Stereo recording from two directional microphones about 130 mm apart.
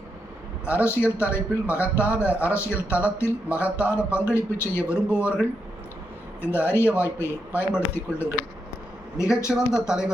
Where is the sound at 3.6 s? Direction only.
10° right (ahead or behind).